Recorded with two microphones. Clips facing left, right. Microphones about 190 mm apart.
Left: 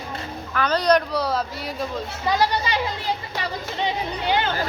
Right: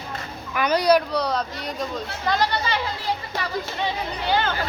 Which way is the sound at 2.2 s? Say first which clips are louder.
Left 1 dB; 10° left (ahead or behind).